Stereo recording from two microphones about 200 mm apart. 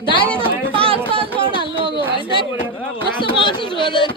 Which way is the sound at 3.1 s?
25° left (ahead or behind).